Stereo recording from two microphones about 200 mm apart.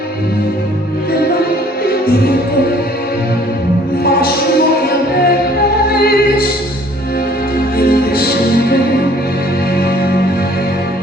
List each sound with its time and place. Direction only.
4.0 s music: 50° left (ahead or behind)
5.9 s opera: 50° left (ahead or behind)
7.8 s music: 50° left (ahead or behind)